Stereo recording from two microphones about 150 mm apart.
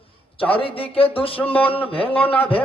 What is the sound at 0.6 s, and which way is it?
Music, 40° left (ahead or behind).